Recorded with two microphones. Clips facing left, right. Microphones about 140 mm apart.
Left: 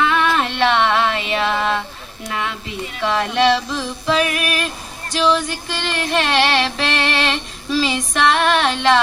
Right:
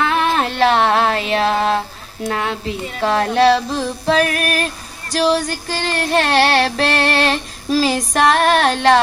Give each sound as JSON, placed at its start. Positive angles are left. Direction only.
{"t": 0.0, "sound": "music", "side_deg": -40}
{"t": 2.3, "sound": "female singing", "side_deg": -40}